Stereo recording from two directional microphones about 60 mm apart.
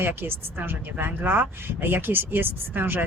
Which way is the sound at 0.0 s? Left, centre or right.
Right.